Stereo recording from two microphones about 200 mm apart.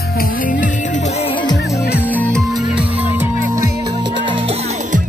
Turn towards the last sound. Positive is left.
turn(degrees=-25)  # may be behind; listen again after turning